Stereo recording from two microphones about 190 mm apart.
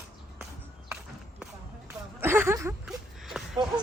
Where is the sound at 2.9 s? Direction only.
Centre (ahead or behind).